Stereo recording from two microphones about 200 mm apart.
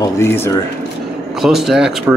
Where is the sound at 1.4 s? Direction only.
Centre (ahead or behind).